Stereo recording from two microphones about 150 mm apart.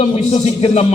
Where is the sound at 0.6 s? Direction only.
45° left (ahead or behind).